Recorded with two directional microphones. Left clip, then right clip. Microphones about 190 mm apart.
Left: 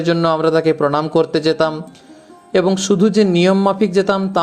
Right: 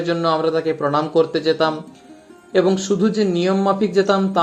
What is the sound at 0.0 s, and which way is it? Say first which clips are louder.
Speech: left 3 dB; 25° left (ahead or behind).